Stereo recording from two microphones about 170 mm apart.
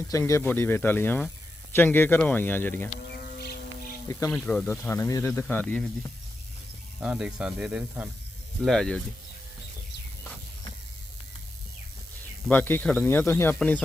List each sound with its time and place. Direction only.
0.1 s speech: 20° left (ahead or behind)
3.1 s insect: 65° left (ahead or behind)
4.1 s speech: 20° left (ahead or behind)
4.4 s speech: 5° left (ahead or behind)
7.0 s speech: 5° right (ahead or behind)
8.6 s speech: 5° left (ahead or behind)
12.5 s speech: 10° left (ahead or behind)